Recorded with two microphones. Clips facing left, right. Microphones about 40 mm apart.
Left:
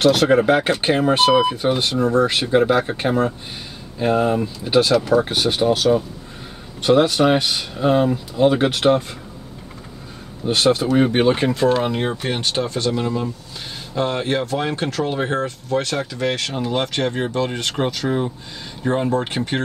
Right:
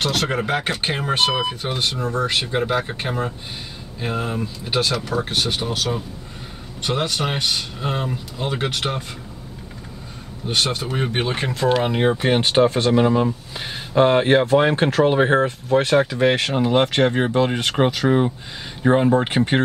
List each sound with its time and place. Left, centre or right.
0.0 s speech: centre
10.4 s speech: centre
11.8 s speech: centre